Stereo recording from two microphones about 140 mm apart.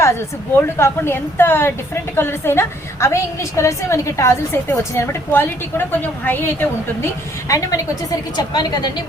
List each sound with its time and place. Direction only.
0.5 s a woman's voice: 15° left (ahead or behind)